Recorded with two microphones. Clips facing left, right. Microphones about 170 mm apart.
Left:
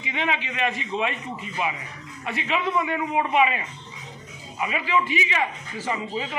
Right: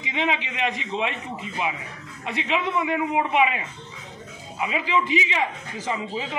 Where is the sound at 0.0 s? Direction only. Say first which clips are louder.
Right 2 dB; 20° right (ahead or behind).